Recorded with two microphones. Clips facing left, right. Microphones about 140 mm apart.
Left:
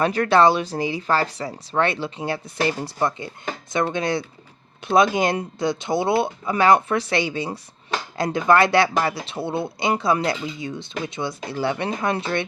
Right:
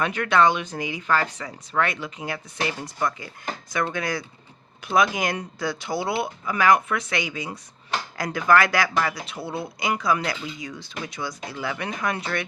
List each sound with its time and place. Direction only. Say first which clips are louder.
0.0 s speech: left 4 dB; 35° left (ahead or behind)